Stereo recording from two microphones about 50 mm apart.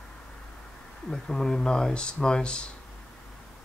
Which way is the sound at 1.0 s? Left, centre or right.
Centre.